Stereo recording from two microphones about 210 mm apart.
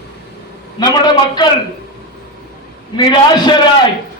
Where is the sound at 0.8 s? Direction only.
20° left (ahead or behind).